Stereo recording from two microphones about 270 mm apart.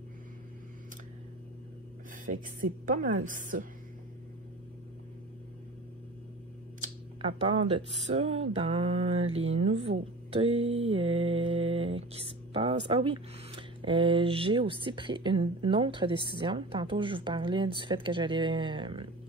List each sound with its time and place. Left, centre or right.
2.6 s speech: right
6.8 s speech: centre
9.2 s mantra: right
9.7 s speech: right